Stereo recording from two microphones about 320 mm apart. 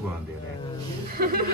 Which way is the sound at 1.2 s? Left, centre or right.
Right.